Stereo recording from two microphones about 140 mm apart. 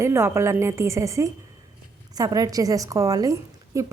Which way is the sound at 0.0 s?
20° right (ahead or behind).